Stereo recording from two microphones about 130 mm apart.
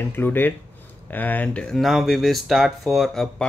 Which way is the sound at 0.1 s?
15° left (ahead or behind).